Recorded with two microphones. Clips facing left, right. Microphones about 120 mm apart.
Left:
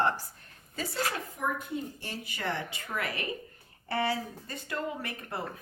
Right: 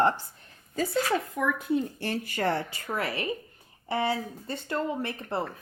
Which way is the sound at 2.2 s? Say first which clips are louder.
Right 5 dB; 45° right (ahead or behind).